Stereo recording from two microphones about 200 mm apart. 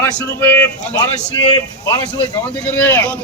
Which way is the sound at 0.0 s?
10° left (ahead or behind).